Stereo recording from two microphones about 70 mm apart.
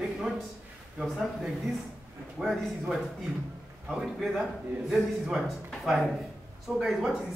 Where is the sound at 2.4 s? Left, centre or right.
Centre.